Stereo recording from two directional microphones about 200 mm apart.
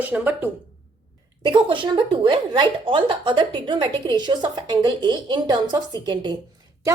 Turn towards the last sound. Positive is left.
turn(degrees=-20)  # may be behind; listen again after turning